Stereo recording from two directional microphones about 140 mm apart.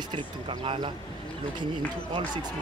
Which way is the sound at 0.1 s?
35° right (ahead or behind).